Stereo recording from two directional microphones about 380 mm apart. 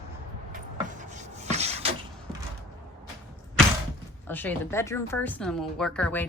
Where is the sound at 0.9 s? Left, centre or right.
Centre.